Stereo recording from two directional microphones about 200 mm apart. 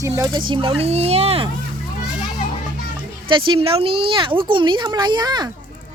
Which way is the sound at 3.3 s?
25° right (ahead or behind).